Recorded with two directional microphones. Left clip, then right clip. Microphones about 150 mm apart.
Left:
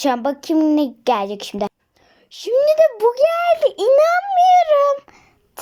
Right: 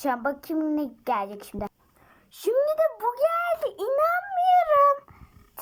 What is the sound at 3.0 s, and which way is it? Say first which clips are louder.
A child's voice: left 9 dB; 25° left (ahead or behind).